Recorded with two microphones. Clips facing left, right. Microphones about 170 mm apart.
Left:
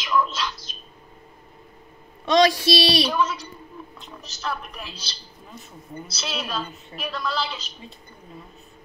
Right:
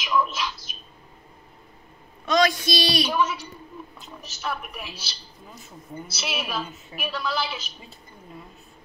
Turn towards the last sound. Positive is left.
turn(degrees=-5)  # may be behind; listen again after turning